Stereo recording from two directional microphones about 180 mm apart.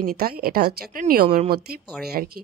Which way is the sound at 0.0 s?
55° right (ahead or behind).